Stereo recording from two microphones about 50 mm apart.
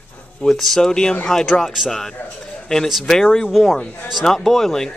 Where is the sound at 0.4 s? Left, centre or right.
Centre.